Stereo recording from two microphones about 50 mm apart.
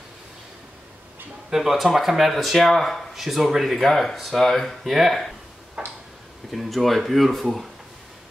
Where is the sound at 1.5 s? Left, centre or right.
Centre.